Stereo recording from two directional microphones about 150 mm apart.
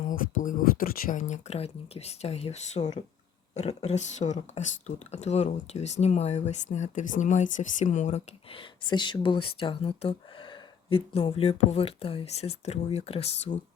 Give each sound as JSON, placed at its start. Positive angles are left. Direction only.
{"t": 0.0, "sound": "speech", "side_deg": 65}